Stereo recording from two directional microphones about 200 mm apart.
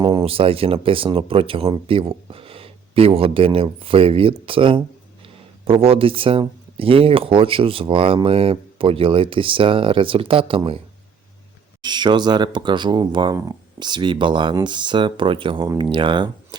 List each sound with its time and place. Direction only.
0.0 s speech: 20° right (ahead or behind)
11.8 s speech: 20° right (ahead or behind)